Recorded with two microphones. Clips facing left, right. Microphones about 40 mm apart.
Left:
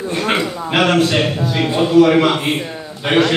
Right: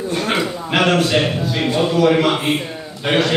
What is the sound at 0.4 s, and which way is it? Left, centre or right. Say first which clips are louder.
A man's voice: left 1 dB; centre.